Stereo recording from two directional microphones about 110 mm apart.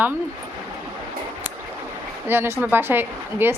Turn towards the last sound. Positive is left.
turn(degrees=-20)  # may be behind; listen again after turning